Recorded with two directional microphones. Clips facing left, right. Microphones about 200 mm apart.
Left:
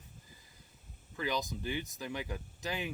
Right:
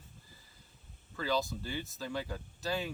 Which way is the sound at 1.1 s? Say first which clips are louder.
Right 2 dB; 15° left (ahead or behind).